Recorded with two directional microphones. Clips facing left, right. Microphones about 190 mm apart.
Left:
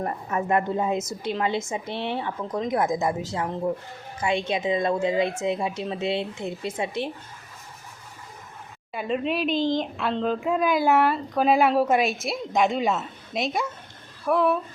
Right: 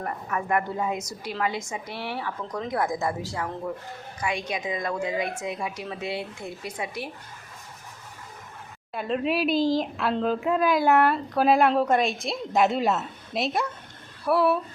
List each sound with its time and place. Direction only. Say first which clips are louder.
0.0 s a woman's voice: left 3 dB; 25° left (ahead or behind)
8.9 s speech: even; centre (ahead or behind)